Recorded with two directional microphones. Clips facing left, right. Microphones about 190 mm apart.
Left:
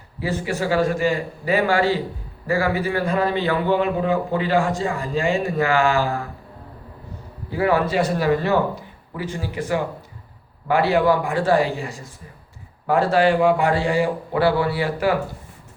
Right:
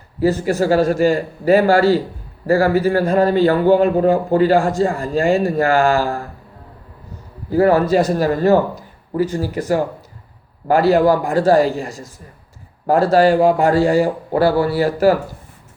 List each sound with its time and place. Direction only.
0.2 s a man's voice: 45° right (ahead or behind)
7.5 s a man's voice: 40° right (ahead or behind)